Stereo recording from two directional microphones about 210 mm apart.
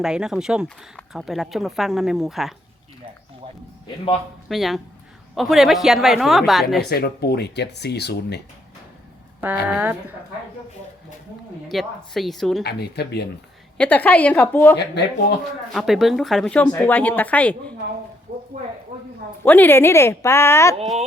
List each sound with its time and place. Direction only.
0.0 s speech: 5° right (ahead or behind)
3.8 s a man's voice: 25° left (ahead or behind)
4.4 s speech: centre (ahead or behind)
6.8 s speech: 50° left (ahead or behind)
9.6 s a woman's voice: 10° right (ahead or behind)
11.7 s speech: centre (ahead or behind)
12.6 s speech: 50° left (ahead or behind)
13.7 s speech: 10° left (ahead or behind)
14.8 s speech: 50° left (ahead or behind)
15.7 s speech: centre (ahead or behind)
18.3 s a sound: 30° right (ahead or behind)
19.4 s speech: 10° left (ahead or behind)